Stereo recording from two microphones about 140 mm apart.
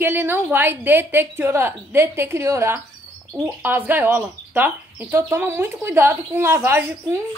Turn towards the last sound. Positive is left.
turn(degrees=-15)  # may be behind; listen again after turning